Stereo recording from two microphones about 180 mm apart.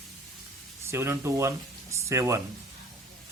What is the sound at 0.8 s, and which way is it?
Speech, 15° right (ahead or behind).